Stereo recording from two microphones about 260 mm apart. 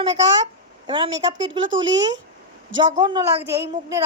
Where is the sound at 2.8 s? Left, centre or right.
Centre.